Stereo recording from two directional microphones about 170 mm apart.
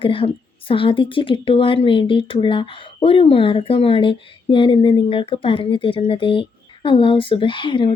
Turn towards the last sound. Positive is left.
turn(degrees=30)  # may be behind; listen again after turning